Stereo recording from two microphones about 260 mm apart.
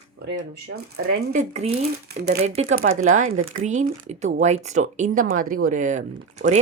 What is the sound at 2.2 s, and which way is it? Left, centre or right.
Speech, right.